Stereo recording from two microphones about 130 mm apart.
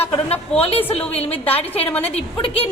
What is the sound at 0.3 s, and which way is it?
A woman's voice, 50° left (ahead or behind).